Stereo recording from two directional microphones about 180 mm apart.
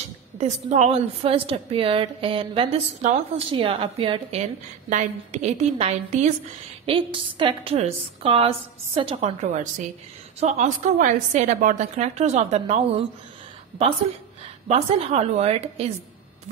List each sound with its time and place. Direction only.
0.4 s a woman's voice: 35° right (ahead or behind)
14.7 s a woman's voice: 35° right (ahead or behind)